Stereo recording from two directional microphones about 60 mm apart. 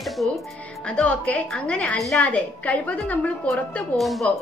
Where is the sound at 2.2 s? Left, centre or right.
Left.